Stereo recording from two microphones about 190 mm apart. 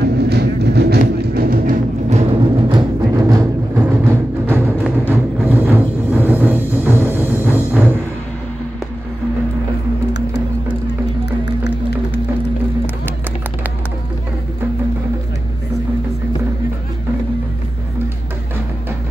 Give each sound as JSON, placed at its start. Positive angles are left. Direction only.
{"t": 0.0, "sound": "music", "side_deg": -60}
{"t": 3.2, "sound": "music", "side_deg": -15}